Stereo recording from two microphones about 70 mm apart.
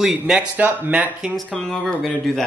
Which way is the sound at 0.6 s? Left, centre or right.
Right.